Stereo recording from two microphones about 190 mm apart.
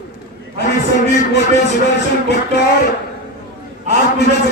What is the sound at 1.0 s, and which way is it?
Speech, 65° left (ahead or behind).